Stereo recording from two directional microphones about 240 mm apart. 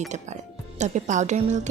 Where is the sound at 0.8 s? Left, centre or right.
Right.